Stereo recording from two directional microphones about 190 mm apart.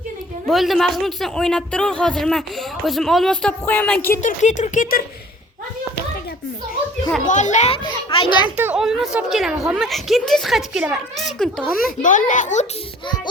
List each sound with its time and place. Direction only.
0.4 s speech: centre (ahead or behind)
4.2 s speech: 40° left (ahead or behind)
7.3 s speech: 40° left (ahead or behind)
7.9 s a child's voice: 25° left (ahead or behind)
8.5 s speech: 5° right (ahead or behind)
11.9 s a child's voice: 45° left (ahead or behind)